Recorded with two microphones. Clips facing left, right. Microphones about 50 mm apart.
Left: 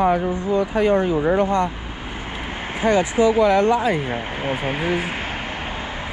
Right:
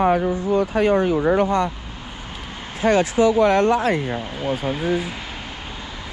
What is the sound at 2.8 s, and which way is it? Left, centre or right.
Speech, right.